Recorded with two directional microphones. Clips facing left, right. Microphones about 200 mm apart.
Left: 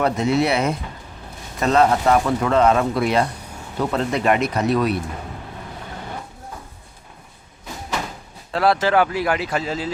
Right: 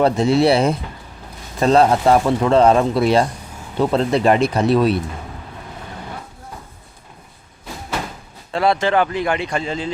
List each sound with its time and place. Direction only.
0.0 s a man's voice: 30° right (ahead or behind)
8.5 s speech: centre (ahead or behind)